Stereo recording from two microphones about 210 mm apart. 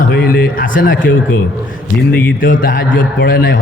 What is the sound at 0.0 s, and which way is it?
Speech, 45° left (ahead or behind).